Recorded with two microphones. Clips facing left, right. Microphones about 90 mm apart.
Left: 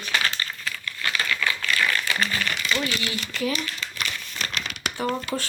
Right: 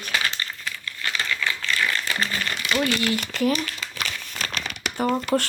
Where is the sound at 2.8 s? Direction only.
50° right (ahead or behind).